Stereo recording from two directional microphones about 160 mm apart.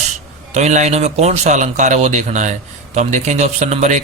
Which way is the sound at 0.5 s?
45° right (ahead or behind).